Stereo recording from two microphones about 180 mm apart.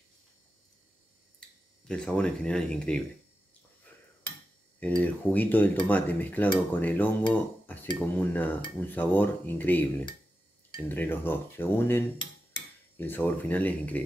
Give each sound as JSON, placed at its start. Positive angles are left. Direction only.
{"t": 1.9, "sound": "speech", "side_deg": 5}
{"t": 4.7, "sound": "cutlery", "side_deg": 10}